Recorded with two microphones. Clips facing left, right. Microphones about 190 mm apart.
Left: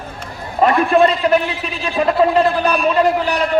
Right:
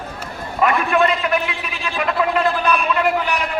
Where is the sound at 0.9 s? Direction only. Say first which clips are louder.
Left 5 dB; 35° left (ahead or behind).